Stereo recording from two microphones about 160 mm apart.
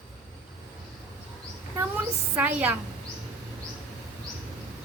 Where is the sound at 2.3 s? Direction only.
10° right (ahead or behind).